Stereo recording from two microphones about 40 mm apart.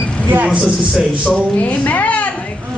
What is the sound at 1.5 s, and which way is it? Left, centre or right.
Speech, left.